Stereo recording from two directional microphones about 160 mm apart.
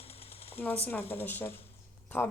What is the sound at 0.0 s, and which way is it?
Sewing machine, 40° left (ahead or behind).